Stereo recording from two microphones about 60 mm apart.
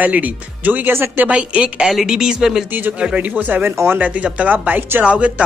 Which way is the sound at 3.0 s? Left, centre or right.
Centre.